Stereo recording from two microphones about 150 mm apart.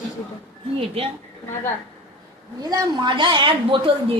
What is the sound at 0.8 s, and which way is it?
Speech, 40° right (ahead or behind).